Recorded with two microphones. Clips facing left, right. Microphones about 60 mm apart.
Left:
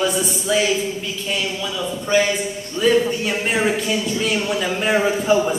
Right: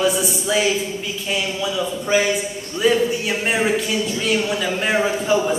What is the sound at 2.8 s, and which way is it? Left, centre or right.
A man's voice, centre.